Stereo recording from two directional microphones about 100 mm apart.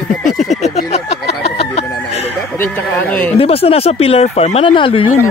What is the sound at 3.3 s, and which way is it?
Speech, 75° left (ahead or behind).